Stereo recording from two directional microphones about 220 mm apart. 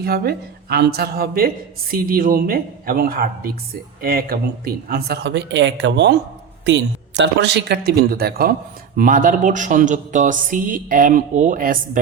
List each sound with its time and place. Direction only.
0.0 s speech: 45° right (ahead or behind)